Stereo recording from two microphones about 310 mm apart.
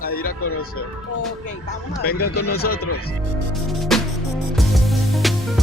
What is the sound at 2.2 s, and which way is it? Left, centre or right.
Speech, left.